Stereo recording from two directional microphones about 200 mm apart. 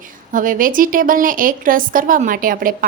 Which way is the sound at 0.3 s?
40° right (ahead or behind).